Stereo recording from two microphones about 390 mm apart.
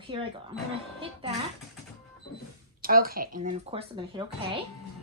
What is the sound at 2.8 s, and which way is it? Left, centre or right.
Speech, right.